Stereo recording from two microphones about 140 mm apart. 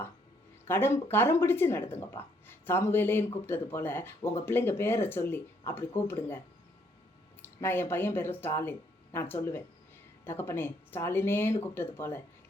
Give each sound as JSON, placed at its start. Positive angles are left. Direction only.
{"t": 0.7, "sound": "speech", "side_deg": 15}
{"t": 7.4, "sound": "speech", "side_deg": 15}